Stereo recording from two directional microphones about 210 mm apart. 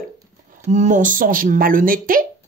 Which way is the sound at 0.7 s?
35° right (ahead or behind).